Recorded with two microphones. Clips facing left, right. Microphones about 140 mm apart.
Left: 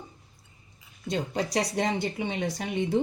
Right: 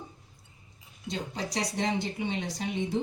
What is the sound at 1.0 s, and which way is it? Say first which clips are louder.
Speech: left 5 dB; 60° left (ahead or behind).